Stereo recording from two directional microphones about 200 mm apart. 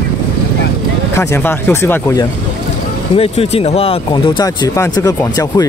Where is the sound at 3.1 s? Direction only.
30° left (ahead or behind).